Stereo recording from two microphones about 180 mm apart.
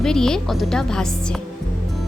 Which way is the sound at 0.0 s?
5° left (ahead or behind).